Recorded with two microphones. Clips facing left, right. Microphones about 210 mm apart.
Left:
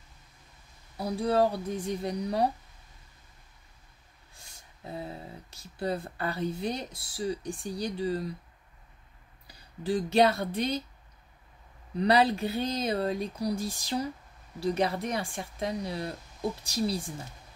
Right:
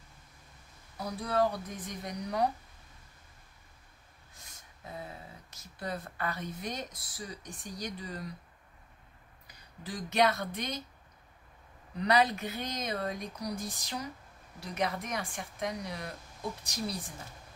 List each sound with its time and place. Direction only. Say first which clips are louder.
0.9 s speech: left 5 dB; 30° left (ahead or behind)
4.4 s a sound: left 3 dB; 30° left (ahead or behind)
5.5 s speech: left 7 dB; 30° left (ahead or behind)
9.5 s speech: left 12 dB; 30° left (ahead or behind)
12.0 s speech: left 4 dB; 30° left (ahead or behind)